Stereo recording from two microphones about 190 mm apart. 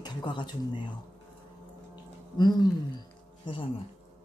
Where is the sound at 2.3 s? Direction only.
25° left (ahead or behind).